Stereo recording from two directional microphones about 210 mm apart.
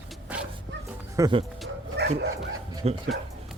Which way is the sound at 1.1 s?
20° right (ahead or behind).